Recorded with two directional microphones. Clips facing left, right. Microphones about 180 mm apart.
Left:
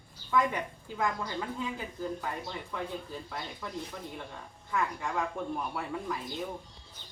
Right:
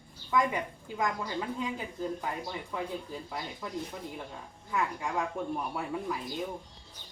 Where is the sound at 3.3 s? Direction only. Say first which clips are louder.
Right 2 dB; 10° right (ahead or behind).